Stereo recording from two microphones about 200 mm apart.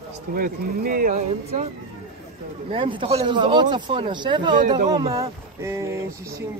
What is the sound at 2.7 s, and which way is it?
Speech, 25° right (ahead or behind).